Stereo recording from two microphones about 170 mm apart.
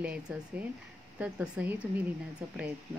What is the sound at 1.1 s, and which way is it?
A woman's voice, 5° right (ahead or behind).